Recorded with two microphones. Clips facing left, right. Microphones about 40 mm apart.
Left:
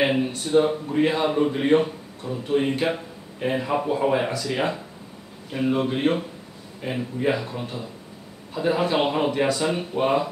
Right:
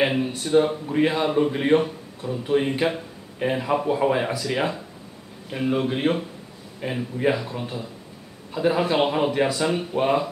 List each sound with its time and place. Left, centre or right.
0.0 s speech: centre
3.8 s speech: centre